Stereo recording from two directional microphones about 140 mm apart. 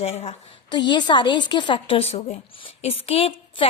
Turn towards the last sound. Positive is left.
turn(degrees=40)  # may be behind; listen again after turning